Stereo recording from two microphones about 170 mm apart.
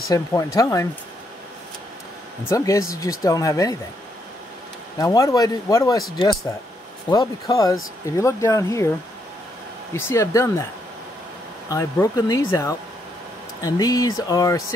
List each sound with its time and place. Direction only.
0.1 s speech: 20° left (ahead or behind)
2.5 s speech: 20° left (ahead or behind)
4.9 s speech: 20° left (ahead or behind)
7.1 s speech: 20° left (ahead or behind)
9.9 s speech: 15° left (ahead or behind)
11.7 s speech: 20° left (ahead or behind)